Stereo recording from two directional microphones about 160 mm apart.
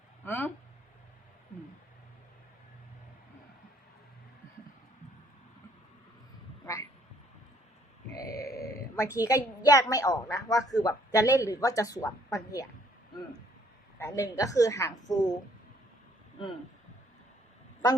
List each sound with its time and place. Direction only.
0.3 s speech: 10° left (ahead or behind)
8.1 s speech: 20° left (ahead or behind)
14.0 s a woman's voice: 20° left (ahead or behind)